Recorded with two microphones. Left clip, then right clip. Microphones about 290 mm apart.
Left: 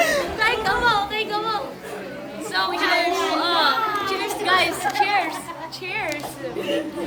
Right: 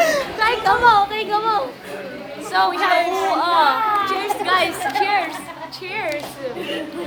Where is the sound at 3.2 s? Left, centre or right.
Centre.